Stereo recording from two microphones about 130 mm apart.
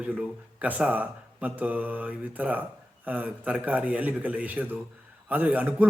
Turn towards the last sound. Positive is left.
turn(degrees=-15)  # may be behind; listen again after turning